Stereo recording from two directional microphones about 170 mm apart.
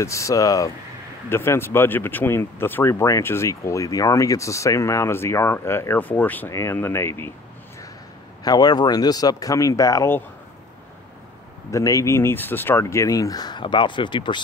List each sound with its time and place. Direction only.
0.0 s speech: 15° left (ahead or behind)
8.5 s speech: 25° left (ahead or behind)
11.7 s speech: 20° left (ahead or behind)